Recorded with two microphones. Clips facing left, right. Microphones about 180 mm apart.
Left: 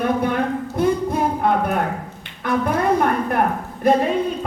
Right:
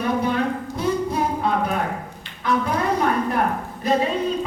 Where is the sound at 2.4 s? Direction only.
55° left (ahead or behind).